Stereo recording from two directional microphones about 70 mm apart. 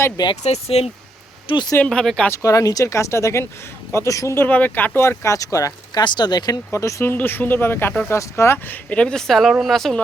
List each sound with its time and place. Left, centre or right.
0.2 s speech: left
1.8 s speech: centre
2.3 s speech: left
4.4 s speech: left
5.0 s speech: left
6.0 s speech: left
6.7 s speech: left
7.0 s speech: left
8.1 s speech: left
8.5 s speech: left
9.0 s speech: centre